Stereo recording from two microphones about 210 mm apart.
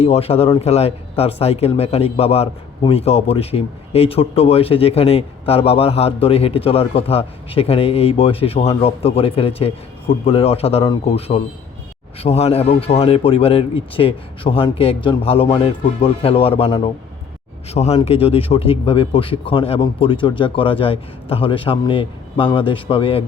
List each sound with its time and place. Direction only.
0.0 s speech: 30° left (ahead or behind)